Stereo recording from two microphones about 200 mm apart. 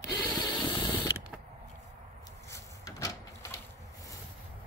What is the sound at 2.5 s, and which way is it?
Drawer open or close, 15° left (ahead or behind).